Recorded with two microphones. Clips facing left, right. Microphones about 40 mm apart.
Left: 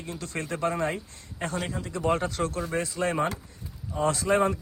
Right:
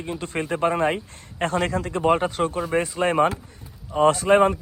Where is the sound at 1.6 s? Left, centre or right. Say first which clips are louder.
Right 9 dB; right.